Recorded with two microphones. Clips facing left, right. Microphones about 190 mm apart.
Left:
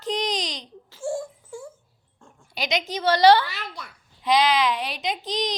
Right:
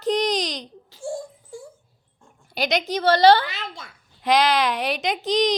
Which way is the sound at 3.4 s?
25° right (ahead or behind).